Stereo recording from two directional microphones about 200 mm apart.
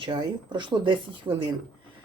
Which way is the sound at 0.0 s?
25° right (ahead or behind).